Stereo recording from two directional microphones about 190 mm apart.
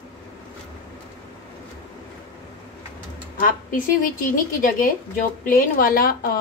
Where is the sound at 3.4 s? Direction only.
45° left (ahead or behind).